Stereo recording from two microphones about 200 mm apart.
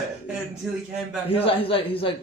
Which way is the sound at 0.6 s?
Centre (ahead or behind).